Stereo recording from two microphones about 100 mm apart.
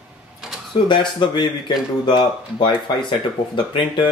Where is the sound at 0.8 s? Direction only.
50° left (ahead or behind).